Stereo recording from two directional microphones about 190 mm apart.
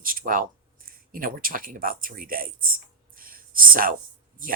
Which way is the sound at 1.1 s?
45° right (ahead or behind).